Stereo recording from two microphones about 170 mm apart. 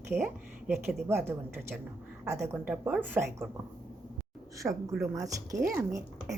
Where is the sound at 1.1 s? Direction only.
15° right (ahead or behind).